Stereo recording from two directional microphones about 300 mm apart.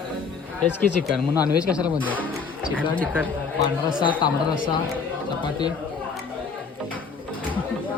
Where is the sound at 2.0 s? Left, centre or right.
Centre.